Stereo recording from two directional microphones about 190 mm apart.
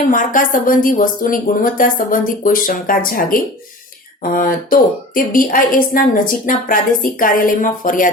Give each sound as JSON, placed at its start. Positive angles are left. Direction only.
{"t": 0.1, "sound": "a woman's voice", "side_deg": 45}